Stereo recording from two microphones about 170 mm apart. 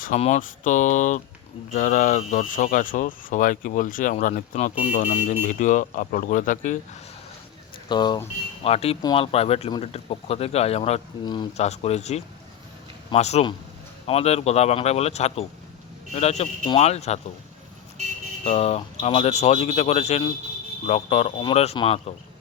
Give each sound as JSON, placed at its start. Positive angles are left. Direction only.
{"t": 0.2, "sound": "speech", "side_deg": 45}
{"t": 7.9, "sound": "speech", "side_deg": 25}
{"t": 8.6, "sound": "a man's voice", "side_deg": 35}
{"t": 18.4, "sound": "a man's voice", "side_deg": 35}